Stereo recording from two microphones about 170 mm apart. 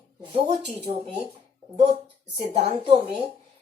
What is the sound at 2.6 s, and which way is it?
Speech, 35° right (ahead or behind).